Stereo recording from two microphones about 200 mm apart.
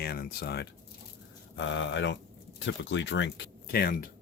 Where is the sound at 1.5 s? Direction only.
65° left (ahead or behind).